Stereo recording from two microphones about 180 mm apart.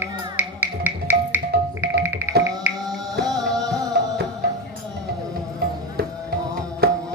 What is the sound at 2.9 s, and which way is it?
Music, 20° right (ahead or behind).